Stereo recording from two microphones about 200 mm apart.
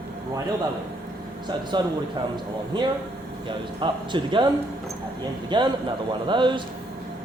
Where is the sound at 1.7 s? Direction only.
20° right (ahead or behind).